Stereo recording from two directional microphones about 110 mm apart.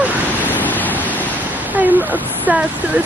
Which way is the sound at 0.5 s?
15° left (ahead or behind).